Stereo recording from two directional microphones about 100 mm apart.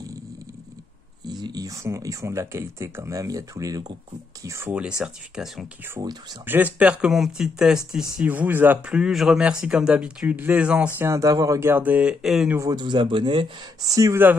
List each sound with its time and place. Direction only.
1.4 s speech: 40° right (ahead or behind)
4.6 s speech: 10° right (ahead or behind)
6.0 s speech: 50° right (ahead or behind)
6.4 s speech: 15° right (ahead or behind)
8.2 s speech: 20° right (ahead or behind)
8.9 s speech: 5° right (ahead or behind)
11.0 s speech: 30° right (ahead or behind)
11.7 s speech: 15° right (ahead or behind)
12.7 s speech: 50° right (ahead or behind)
14.2 s speech: 20° right (ahead or behind)